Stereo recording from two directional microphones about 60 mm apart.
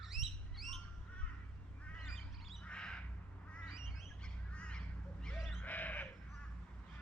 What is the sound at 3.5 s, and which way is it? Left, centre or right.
Duck, centre.